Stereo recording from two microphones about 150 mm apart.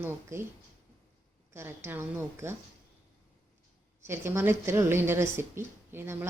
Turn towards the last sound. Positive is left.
turn(degrees=-15)  # may be behind; listen again after turning